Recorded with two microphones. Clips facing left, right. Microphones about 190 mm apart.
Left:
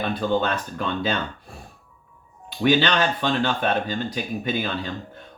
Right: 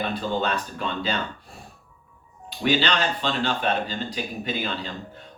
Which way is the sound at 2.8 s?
55° left (ahead or behind).